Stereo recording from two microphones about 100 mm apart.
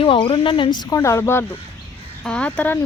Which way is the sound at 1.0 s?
25° left (ahead or behind).